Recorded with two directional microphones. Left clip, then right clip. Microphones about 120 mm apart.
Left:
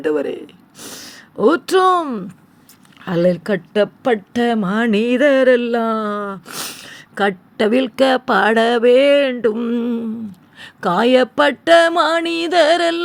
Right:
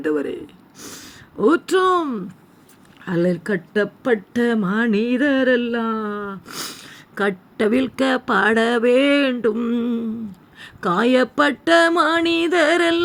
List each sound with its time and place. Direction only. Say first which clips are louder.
0.0 s speech: left 3 dB; 50° left (ahead or behind)
3.0 s speech: left 5 dB; 65° left (ahead or behind)
4.9 s speech: left 8 dB; 90° left
6.4 s speech: left 3 dB; 45° left (ahead or behind)
9.6 s a sound: left 2 dB; 35° left (ahead or behind)